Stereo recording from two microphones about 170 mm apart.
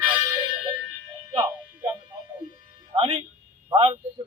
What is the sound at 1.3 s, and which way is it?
Music, 20° right (ahead or behind).